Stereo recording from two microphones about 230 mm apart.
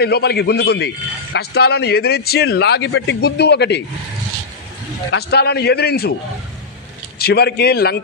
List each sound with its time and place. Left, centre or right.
0.0 s a man's voice: left
5.1 s a man's voice: left
7.2 s a man's voice: left